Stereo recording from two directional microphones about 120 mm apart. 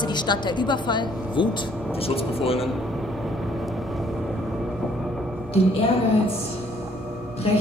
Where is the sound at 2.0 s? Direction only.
55° left (ahead or behind).